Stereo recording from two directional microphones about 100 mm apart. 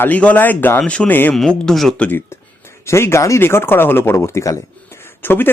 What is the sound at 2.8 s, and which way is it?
A man's voice, 25° left (ahead or behind).